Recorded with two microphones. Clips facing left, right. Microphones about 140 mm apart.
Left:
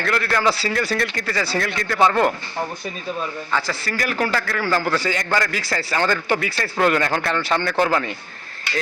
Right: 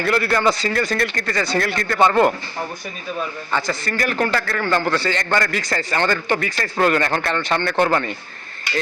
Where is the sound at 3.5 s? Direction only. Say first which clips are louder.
Right 2 dB; 5° left (ahead or behind).